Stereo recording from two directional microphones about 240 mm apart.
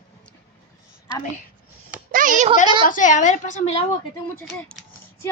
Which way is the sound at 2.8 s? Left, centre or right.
Left.